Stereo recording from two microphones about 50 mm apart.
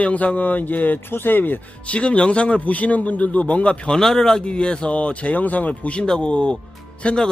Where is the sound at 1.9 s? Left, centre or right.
Left.